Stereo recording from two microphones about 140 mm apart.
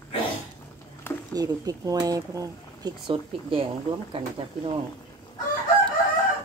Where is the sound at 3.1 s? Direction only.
40° right (ahead or behind).